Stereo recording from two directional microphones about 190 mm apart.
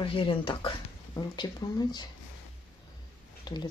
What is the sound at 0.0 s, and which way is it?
Speech, 25° left (ahead or behind).